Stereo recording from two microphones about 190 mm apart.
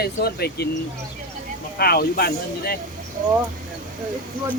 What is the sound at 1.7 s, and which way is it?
Speech, 55° left (ahead or behind).